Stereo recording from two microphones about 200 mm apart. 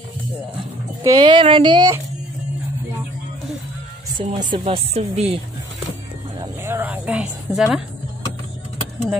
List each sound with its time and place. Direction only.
1.0 s speech: 20° right (ahead or behind)
4.2 s speech: 25° right (ahead or behind)
6.4 s speech: 10° right (ahead or behind)